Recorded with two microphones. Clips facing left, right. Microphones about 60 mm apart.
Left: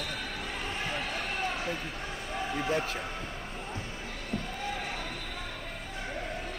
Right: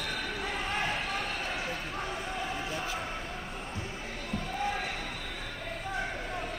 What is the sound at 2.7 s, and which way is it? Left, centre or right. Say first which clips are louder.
Speech: left 5 dB; left.